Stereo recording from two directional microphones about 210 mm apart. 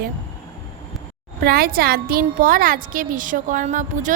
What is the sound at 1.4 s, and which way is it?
A woman's voice, 45° right (ahead or behind).